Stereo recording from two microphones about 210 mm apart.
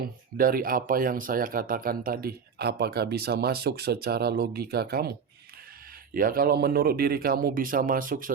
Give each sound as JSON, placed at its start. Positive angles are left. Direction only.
{"t": 0.3, "sound": "speech", "side_deg": -45}
{"t": 6.1, "sound": "speech", "side_deg": -45}